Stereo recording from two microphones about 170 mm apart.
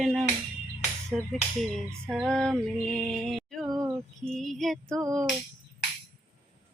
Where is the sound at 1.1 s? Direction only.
10° right (ahead or behind).